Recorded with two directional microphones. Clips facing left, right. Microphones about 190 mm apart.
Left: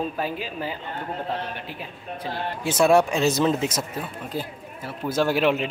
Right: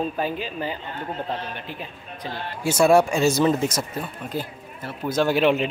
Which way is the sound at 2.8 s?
Centre (ahead or behind).